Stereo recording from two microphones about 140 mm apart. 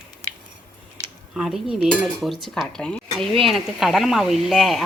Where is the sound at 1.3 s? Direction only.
Centre (ahead or behind).